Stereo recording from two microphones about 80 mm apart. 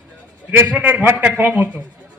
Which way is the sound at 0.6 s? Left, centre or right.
Right.